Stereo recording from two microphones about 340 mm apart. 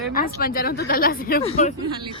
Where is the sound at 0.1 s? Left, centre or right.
Left.